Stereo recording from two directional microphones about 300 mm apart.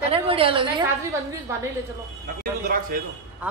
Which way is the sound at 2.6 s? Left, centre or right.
Right.